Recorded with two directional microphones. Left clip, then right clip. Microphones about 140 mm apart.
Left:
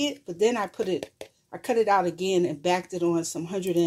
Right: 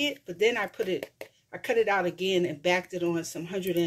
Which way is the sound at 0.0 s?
35° left (ahead or behind).